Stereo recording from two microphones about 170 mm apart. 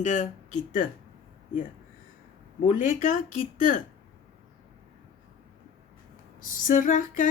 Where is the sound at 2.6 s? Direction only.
50° left (ahead or behind).